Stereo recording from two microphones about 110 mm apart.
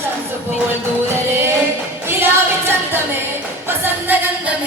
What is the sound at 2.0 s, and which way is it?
Music, 20° right (ahead or behind).